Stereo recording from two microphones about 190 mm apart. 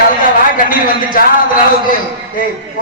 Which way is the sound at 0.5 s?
45° left (ahead or behind).